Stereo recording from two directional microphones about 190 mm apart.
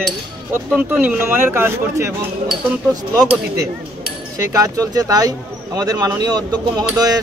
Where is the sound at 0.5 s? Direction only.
10° right (ahead or behind).